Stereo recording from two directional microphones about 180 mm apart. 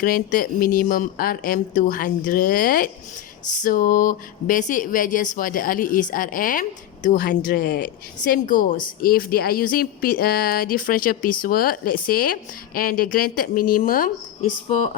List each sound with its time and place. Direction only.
0.0 s speech: 50° left (ahead or behind)